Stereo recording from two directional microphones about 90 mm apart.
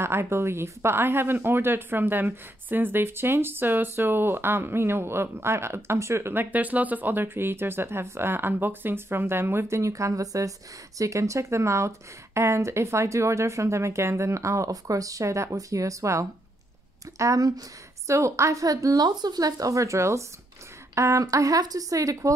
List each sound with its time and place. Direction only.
0.0 s speech: 30° right (ahead or behind)